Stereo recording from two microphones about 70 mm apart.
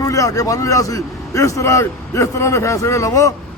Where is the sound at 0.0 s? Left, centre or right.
Left.